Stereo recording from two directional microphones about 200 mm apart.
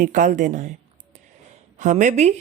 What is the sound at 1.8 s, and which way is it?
Speech, 40° right (ahead or behind).